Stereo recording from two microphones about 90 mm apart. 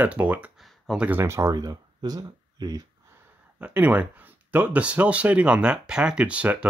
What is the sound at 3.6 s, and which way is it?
Speech, 15° right (ahead or behind).